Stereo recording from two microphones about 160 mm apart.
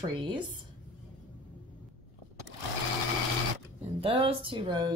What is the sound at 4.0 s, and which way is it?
Speech, 35° right (ahead or behind).